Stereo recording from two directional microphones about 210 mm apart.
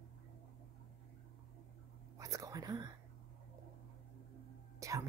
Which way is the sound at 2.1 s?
15° right (ahead or behind).